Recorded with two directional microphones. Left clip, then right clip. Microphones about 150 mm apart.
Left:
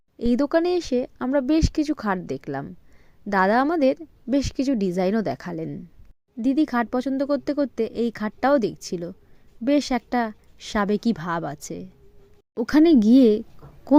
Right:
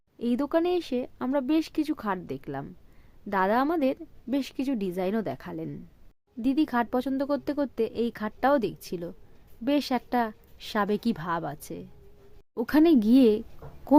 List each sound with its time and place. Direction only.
0.2 s speech: 30° left (ahead or behind)
6.4 s speech: 20° left (ahead or behind)